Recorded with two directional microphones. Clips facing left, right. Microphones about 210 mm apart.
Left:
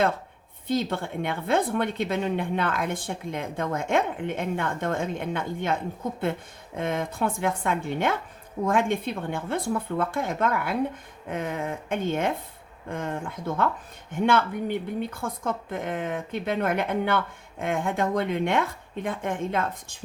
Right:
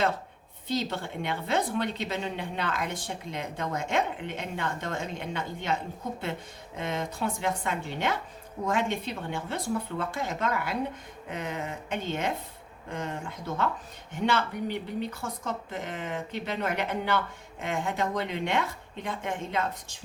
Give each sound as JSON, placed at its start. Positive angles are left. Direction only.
{"t": 0.7, "sound": "a woman's voice", "side_deg": 55}